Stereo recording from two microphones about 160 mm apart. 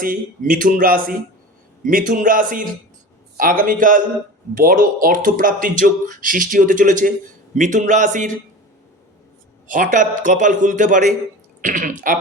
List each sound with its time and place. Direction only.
0.0 s a man's voice: 60° right (ahead or behind)
9.6 s a man's voice: 55° right (ahead or behind)